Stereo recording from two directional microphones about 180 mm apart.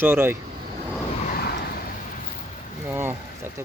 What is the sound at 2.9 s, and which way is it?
Speech, 15° right (ahead or behind).